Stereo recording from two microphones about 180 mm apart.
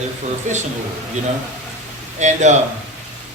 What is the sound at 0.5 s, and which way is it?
Speech, 45° right (ahead or behind).